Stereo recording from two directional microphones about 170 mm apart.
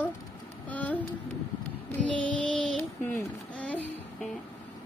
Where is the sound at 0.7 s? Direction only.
10° left (ahead or behind).